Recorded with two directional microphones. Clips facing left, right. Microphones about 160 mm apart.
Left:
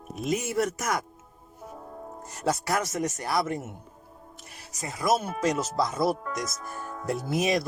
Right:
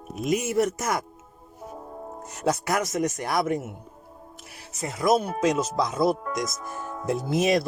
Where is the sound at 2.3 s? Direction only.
15° right (ahead or behind).